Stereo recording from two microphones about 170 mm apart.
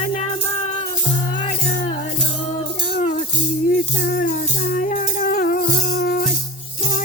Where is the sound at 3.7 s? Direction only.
55° left (ahead or behind).